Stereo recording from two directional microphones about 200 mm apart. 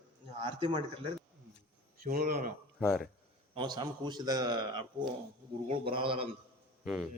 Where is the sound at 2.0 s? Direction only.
45° right (ahead or behind).